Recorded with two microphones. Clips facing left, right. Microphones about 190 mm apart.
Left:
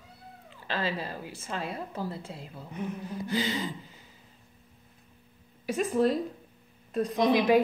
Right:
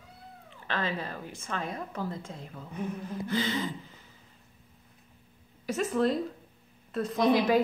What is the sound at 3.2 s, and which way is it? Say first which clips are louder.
Speech: even; 15° left (ahead or behind).